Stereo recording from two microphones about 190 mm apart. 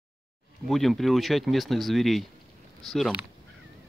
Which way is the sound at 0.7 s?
Centre (ahead or behind).